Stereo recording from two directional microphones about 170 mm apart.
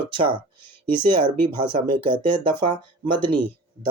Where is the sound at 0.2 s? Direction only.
30° right (ahead or behind).